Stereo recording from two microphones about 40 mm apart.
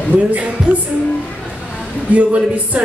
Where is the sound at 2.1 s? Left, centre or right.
Right.